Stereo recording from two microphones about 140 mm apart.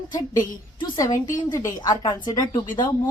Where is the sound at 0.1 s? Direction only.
25° left (ahead or behind).